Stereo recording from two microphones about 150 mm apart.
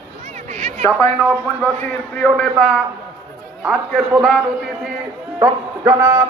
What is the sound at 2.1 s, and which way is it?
Speech, 5° left (ahead or behind).